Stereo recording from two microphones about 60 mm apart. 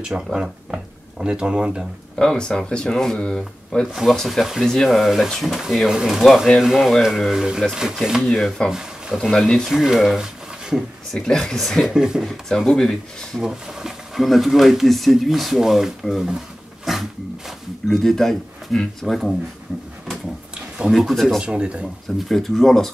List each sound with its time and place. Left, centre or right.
0.0 s speech: centre
2.1 s speech: centre
3.8 s speech: centre
9.2 s speech: centre
9.7 s speech: centre
11.1 s speech: centre
11.9 s speech: centre
12.3 s speech: centre
13.4 s speech: centre
20.5 s a sound: centre
20.9 s speech: centre
21.4 s speech: centre
21.8 s speech: centre